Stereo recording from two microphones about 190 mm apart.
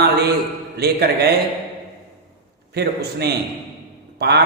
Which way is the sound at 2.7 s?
60° right (ahead or behind).